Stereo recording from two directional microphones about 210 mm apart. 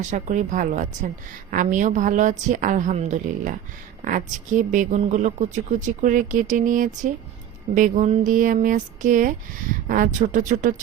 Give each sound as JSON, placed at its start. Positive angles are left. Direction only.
{"t": 0.1, "sound": "a woman's voice", "side_deg": -35}